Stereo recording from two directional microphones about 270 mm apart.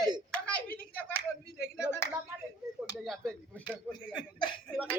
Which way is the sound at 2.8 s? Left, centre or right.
Centre.